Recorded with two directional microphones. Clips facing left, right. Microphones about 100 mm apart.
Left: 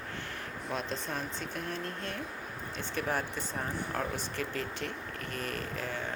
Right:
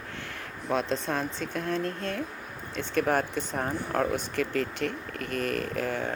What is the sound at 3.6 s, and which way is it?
Speech, 55° right (ahead or behind).